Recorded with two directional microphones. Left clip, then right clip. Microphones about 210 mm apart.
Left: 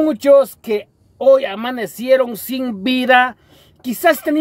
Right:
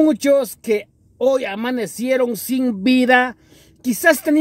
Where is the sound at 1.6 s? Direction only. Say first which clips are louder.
Even; 35° left (ahead or behind).